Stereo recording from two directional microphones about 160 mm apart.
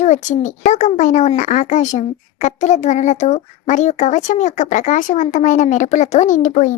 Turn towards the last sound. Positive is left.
turn(degrees=50)  # may be behind; listen again after turning